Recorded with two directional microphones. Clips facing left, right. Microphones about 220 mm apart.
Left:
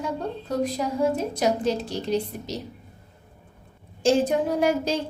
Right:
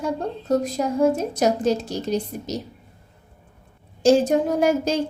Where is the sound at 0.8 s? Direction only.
45° right (ahead or behind).